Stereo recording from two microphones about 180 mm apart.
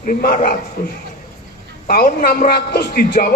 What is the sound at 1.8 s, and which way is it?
A man's voice, 55° left (ahead or behind).